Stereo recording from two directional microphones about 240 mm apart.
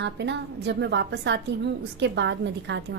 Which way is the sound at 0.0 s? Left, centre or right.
Right.